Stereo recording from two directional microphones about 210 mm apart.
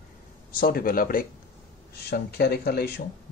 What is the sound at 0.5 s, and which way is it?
Speech, 45° left (ahead or behind).